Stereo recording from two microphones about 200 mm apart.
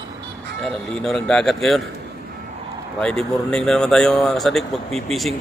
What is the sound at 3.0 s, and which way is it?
Speech, 5° left (ahead or behind).